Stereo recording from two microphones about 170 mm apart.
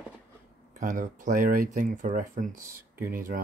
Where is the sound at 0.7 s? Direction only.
50° right (ahead or behind).